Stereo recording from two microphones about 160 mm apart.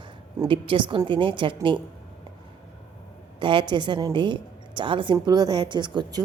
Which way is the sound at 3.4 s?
30° right (ahead or behind).